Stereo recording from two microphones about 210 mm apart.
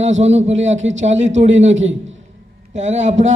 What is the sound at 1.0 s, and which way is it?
Speech, 35° right (ahead or behind).